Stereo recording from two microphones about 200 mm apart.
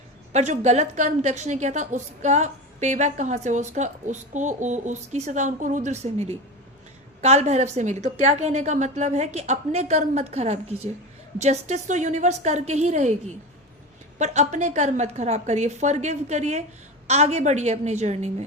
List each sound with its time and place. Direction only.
0.3 s a woman's voice: 35° right (ahead or behind)